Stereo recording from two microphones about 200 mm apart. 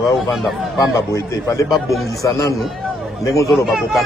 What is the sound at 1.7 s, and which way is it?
Speech, centre (ahead or behind).